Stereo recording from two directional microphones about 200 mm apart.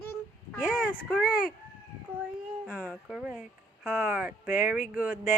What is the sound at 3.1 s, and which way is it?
Speech, 5° right (ahead or behind).